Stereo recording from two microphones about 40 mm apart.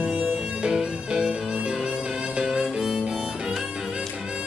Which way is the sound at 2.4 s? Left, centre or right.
Centre.